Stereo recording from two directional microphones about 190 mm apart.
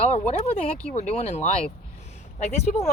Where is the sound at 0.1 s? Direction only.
35° left (ahead or behind).